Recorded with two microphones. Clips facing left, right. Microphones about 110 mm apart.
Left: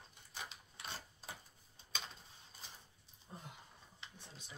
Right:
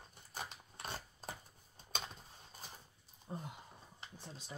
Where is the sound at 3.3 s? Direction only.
35° right (ahead or behind).